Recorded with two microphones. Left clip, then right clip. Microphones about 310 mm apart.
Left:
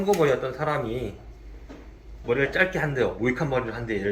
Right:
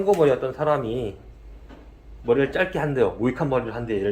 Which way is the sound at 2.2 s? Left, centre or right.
Centre.